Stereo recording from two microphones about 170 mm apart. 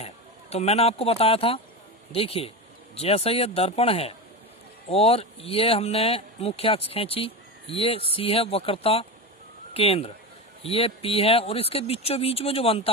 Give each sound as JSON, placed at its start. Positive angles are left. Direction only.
{"t": 0.5, "sound": "speech", "side_deg": 35}